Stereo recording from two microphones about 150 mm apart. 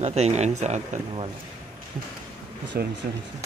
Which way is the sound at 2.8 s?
90° right.